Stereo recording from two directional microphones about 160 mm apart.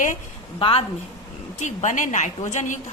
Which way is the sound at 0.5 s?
30° left (ahead or behind).